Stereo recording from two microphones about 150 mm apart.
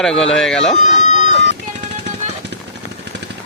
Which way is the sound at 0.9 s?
50° left (ahead or behind).